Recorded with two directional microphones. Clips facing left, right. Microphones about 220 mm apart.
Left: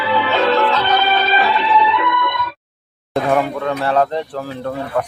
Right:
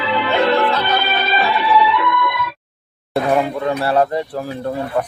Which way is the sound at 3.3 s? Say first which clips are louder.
Even; 15° right (ahead or behind).